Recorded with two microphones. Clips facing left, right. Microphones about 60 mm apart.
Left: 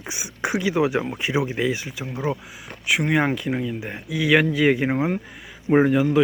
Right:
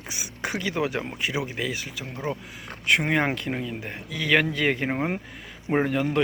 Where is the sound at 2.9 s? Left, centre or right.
Centre.